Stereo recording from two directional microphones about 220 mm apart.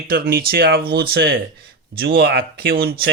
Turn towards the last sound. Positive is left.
turn(degrees=-45)  # may be behind; listen again after turning